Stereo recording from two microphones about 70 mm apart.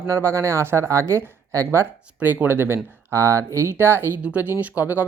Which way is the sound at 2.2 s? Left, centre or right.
Right.